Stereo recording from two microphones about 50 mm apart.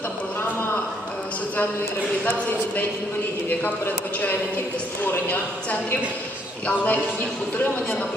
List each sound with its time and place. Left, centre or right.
2.2 s a man's voice: left
6.7 s a man's voice: left